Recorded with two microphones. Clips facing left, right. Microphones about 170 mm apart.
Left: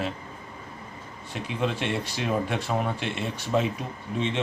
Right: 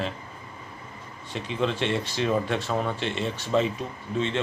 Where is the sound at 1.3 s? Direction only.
10° left (ahead or behind).